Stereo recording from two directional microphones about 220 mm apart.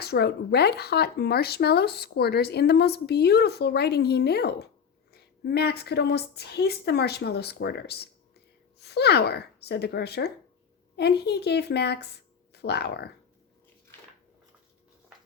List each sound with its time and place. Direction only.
0.0 s speech: 45° left (ahead or behind)